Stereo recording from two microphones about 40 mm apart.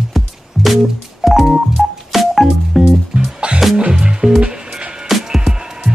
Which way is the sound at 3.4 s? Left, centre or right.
Right.